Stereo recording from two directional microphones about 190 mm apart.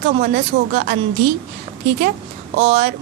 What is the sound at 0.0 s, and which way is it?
Speech, 45° right (ahead or behind).